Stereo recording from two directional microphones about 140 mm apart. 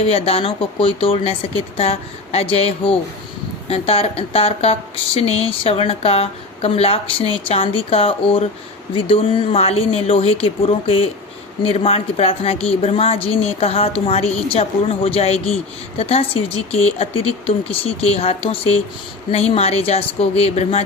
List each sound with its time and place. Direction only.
0.1 s speech: 45° left (ahead or behind)